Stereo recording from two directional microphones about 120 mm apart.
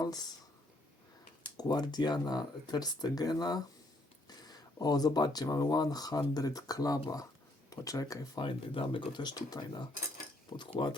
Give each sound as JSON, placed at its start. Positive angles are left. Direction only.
{"t": 0.0, "sound": "speech", "side_deg": 30}
{"t": 1.5, "sound": "speech", "side_deg": 35}
{"t": 8.4, "sound": "speech", "side_deg": 45}